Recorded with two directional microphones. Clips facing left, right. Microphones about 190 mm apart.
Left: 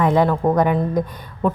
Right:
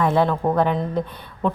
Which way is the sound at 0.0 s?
15° left (ahead or behind).